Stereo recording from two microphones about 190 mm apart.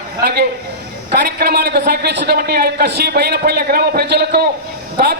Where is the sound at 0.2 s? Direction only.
55° right (ahead or behind).